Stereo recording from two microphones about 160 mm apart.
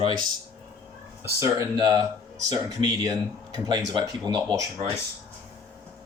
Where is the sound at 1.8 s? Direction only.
30° right (ahead or behind).